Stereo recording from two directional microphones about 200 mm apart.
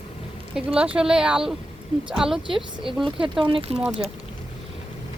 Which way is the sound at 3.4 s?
25° right (ahead or behind).